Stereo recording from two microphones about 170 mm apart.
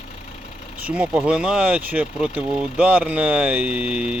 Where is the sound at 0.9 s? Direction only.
5° right (ahead or behind).